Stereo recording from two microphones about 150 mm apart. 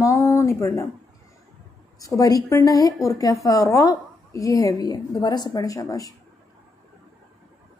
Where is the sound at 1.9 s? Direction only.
25° left (ahead or behind).